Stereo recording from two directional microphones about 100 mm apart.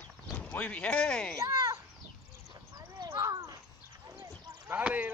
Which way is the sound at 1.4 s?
35° right (ahead or behind).